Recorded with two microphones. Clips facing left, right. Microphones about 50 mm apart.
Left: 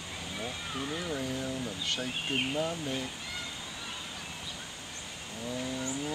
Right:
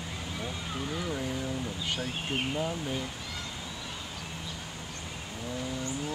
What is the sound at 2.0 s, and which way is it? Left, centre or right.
Speech, centre.